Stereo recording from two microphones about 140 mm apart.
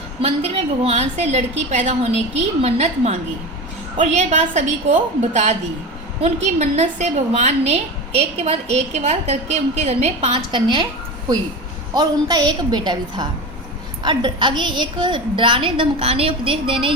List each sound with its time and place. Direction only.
0.2 s a woman's voice: 45° right (ahead or behind)
11.9 s a woman's voice: 30° right (ahead or behind)